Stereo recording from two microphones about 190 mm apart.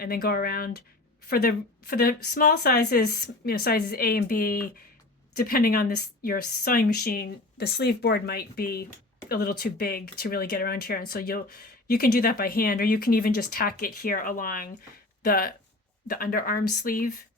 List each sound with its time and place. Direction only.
0.0 s speech: 55° left (ahead or behind)